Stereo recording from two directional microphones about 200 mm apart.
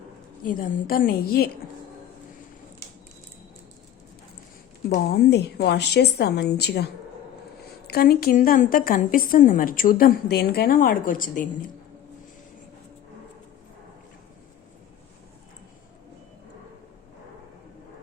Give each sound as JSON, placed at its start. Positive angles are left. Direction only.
{"t": 0.4, "sound": "a woman's voice", "side_deg": 45}
{"t": 5.1, "sound": "a woman's voice", "side_deg": 55}